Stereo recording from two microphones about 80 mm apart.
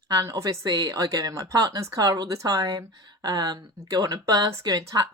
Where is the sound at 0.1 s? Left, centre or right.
Right.